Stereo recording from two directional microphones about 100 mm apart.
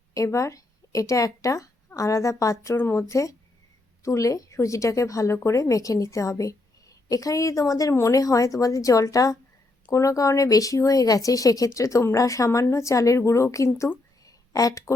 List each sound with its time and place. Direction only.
0.1 s speech: 30° left (ahead or behind)
2.7 s a woman's voice: 25° left (ahead or behind)
14.3 s a sound: 35° left (ahead or behind)